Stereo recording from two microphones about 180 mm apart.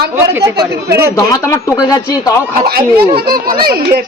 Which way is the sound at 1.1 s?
15° left (ahead or behind).